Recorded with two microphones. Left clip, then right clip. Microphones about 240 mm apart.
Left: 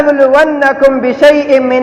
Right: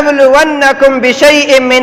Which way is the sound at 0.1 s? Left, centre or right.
Right.